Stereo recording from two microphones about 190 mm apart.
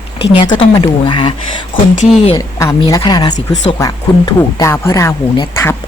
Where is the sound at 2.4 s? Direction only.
15° left (ahead or behind).